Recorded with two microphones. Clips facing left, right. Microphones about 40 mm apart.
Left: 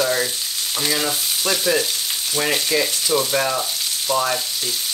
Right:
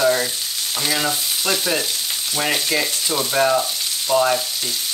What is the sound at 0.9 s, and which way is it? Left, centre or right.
Frying, centre.